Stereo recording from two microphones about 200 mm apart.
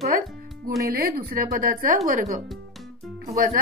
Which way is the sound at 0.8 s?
50° right (ahead or behind).